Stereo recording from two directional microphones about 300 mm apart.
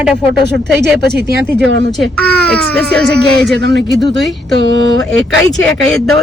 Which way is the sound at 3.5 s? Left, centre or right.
Right.